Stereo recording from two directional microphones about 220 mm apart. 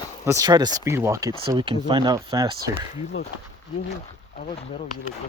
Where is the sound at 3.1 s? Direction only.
65° left (ahead or behind).